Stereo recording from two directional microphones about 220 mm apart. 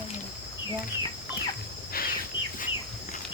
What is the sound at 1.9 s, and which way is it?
Bird, 40° left (ahead or behind).